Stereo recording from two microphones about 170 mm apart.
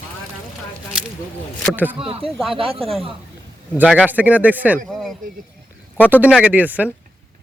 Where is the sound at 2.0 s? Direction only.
35° right (ahead or behind).